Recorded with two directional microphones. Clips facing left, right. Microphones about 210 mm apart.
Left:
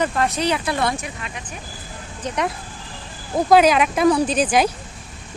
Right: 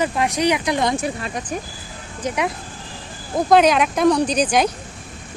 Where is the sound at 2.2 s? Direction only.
5° right (ahead or behind).